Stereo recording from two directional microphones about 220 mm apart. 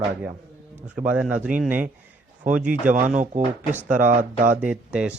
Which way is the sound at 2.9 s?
35° right (ahead or behind).